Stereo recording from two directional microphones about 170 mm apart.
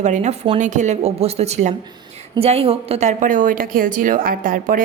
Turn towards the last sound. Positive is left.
turn(degrees=-55)  # may be behind; listen again after turning